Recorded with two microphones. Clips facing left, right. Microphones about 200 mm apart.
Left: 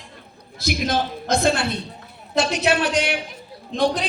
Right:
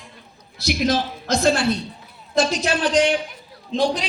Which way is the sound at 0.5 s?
55° left (ahead or behind).